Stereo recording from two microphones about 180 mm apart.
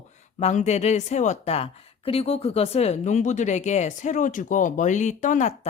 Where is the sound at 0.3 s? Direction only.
40° left (ahead or behind).